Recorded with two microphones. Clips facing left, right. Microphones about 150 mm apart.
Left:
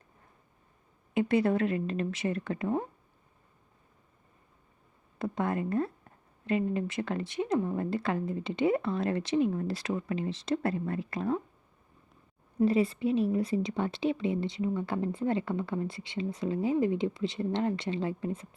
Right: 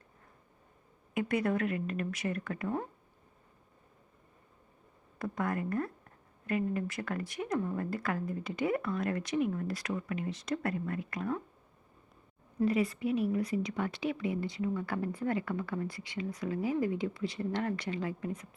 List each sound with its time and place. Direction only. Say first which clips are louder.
1.1 s a woman's voice: left 5 dB; 30° left (ahead or behind)
5.2 s a woman's voice: left 3 dB; 25° left (ahead or behind)
12.5 s a woman's voice: left 4 dB; 30° left (ahead or behind)